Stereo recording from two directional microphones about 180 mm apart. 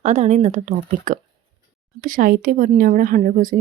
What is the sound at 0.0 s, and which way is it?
A woman's voice, 40° right (ahead or behind).